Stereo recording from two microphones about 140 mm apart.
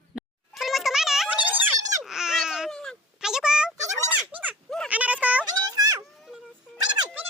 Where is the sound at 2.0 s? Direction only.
5° right (ahead or behind).